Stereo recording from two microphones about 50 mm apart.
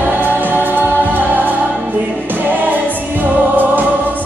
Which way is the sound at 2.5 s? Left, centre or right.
Right.